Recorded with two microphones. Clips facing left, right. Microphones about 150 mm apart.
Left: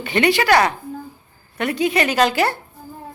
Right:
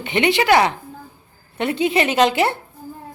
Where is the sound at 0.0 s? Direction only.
20° right (ahead or behind).